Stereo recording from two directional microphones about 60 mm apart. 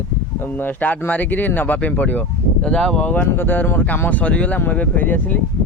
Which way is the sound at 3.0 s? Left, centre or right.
Left.